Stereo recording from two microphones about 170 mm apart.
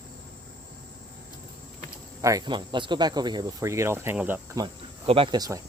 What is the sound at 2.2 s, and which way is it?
Speech, 20° right (ahead or behind).